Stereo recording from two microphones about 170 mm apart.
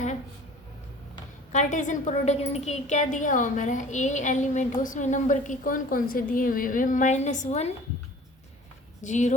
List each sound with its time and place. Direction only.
1.5 s a woman's voice: 45° left (ahead or behind)
9.0 s speech: 45° left (ahead or behind)